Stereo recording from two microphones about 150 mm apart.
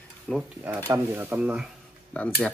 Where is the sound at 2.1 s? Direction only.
10° left (ahead or behind).